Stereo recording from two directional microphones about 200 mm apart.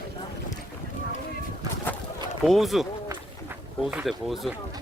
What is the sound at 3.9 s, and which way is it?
Speech, 5° right (ahead or behind).